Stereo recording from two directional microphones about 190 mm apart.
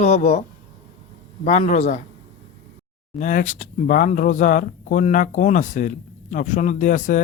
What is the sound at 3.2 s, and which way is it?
Speech, 45° left (ahead or behind).